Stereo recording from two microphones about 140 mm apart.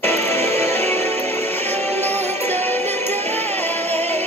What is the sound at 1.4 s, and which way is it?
Music, 15° left (ahead or behind).